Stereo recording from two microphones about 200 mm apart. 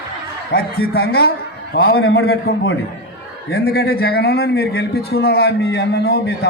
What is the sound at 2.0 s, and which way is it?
Speech, 90° left.